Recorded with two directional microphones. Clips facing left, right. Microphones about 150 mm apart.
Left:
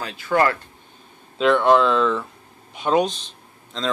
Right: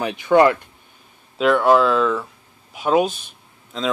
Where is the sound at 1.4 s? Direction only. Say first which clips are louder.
Right 1 dB; 5° right (ahead or behind).